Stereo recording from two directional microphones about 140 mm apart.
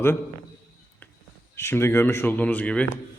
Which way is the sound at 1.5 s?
20° left (ahead or behind).